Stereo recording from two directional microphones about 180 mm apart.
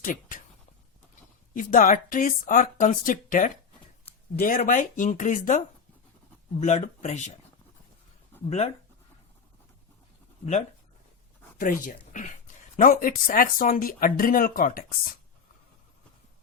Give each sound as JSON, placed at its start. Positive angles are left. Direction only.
{"t": 0.0, "sound": "speech", "side_deg": 50}
{"t": 1.5, "sound": "speech", "side_deg": 50}
{"t": 8.4, "sound": "speech", "side_deg": 35}
{"t": 11.5, "sound": "speech", "side_deg": 50}